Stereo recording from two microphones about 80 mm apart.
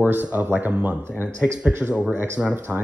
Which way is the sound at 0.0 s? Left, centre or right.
Right.